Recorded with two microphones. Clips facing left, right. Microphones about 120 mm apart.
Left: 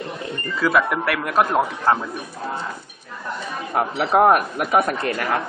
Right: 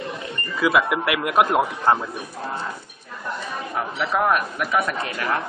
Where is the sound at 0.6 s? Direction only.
10° right (ahead or behind).